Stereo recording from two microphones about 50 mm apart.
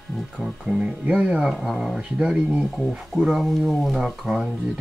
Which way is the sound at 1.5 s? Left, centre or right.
Centre.